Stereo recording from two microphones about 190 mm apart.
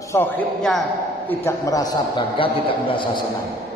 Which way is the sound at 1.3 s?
15° left (ahead or behind).